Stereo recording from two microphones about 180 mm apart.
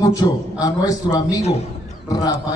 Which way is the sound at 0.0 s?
20° left (ahead or behind).